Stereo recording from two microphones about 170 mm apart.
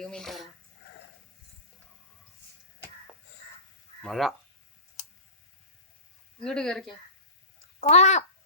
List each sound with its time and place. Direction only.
0.0 s dog: 5° left (ahead or behind)
4.0 s speech: centre (ahead or behind)
6.4 s speech: 5° left (ahead or behind)
7.8 s speech: 45° left (ahead or behind)